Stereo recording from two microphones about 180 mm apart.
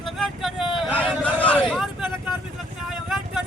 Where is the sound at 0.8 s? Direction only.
5° left (ahead or behind).